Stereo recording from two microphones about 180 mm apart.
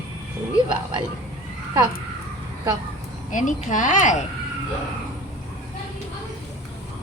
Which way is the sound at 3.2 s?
45° left (ahead or behind).